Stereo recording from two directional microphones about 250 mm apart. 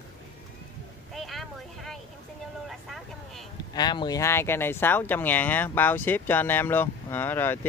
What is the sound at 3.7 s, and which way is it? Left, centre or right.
Speech, centre.